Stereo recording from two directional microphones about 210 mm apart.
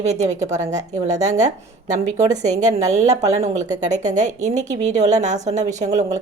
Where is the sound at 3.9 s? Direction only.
35° right (ahead or behind).